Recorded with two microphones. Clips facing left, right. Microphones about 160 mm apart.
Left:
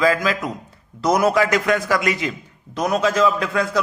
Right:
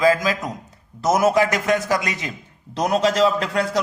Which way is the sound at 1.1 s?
25° right (ahead or behind).